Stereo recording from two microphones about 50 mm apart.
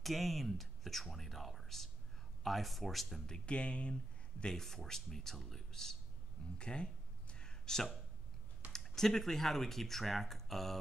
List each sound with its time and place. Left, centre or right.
0.0 s speech: centre
3.3 s speech: left
4.4 s speech: centre
6.6 s a sound: centre
8.7 s speech: centre